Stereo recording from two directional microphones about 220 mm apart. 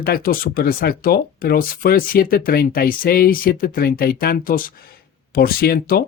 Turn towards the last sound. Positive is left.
turn(degrees=45)  # may be behind; listen again after turning